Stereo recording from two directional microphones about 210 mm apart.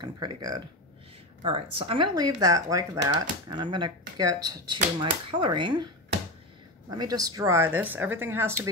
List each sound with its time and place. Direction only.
0.0 s speech: 20° right (ahead or behind)
6.9 s speech: 20° right (ahead or behind)